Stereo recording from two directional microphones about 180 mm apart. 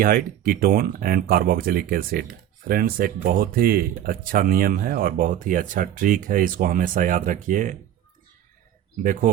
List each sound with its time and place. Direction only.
0.0 s speech: 50° right (ahead or behind)